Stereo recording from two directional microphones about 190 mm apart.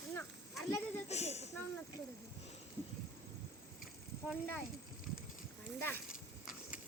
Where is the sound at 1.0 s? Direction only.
35° left (ahead or behind).